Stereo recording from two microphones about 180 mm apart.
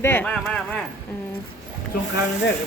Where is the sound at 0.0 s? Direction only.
10° left (ahead or behind).